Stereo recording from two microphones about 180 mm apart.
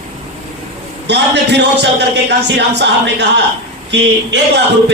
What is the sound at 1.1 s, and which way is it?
Speech, 70° right (ahead or behind).